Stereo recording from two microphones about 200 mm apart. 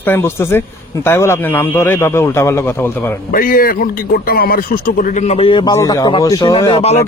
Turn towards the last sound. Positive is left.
turn(degrees=30)  # may be behind; listen again after turning